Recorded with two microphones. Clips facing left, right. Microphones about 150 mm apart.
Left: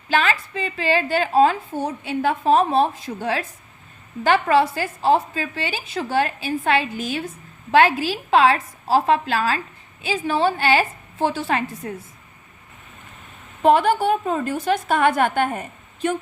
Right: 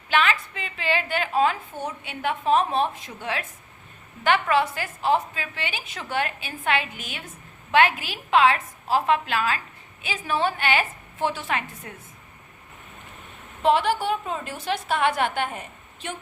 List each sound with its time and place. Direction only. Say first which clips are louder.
0.1 s a woman's voice: left 2 dB; 35° left (ahead or behind)
13.6 s a woman's voice: left 5 dB; 45° left (ahead or behind)